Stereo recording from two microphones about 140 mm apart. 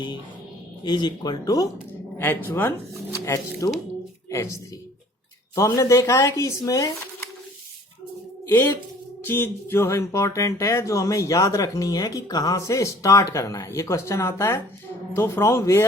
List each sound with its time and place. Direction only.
0.9 s speech: 30° left (ahead or behind)
2.1 s a woman's voice: 15° left (ahead or behind)
8.4 s speech: 15° left (ahead or behind)